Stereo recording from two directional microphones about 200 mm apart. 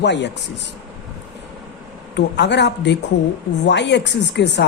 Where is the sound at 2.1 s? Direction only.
60° left (ahead or behind).